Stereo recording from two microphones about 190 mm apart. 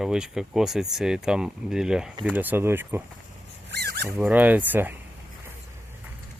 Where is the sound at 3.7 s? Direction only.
60° right (ahead or behind).